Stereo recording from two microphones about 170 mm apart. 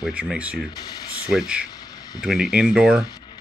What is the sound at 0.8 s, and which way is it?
Speech, 25° left (ahead or behind).